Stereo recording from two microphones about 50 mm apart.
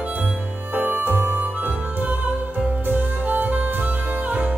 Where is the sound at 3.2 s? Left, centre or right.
Right.